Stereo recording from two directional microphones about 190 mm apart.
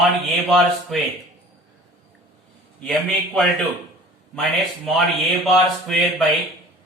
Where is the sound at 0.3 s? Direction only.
Centre (ahead or behind).